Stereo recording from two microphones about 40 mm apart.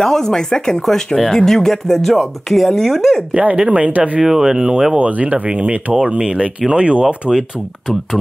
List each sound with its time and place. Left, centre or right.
0.0 s speech: centre
3.5 s speech: right
3.8 s speech: right
4.2 s speech: centre
4.9 s speech: right